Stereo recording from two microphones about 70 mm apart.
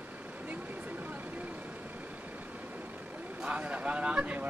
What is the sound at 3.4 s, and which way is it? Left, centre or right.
Speech, centre.